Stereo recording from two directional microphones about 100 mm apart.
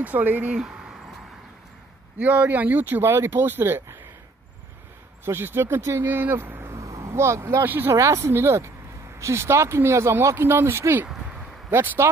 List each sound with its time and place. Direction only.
0.0 s speech: 15° right (ahead or behind)
2.1 s speech: 15° right (ahead or behind)
5.2 s speech: 25° right (ahead or behind)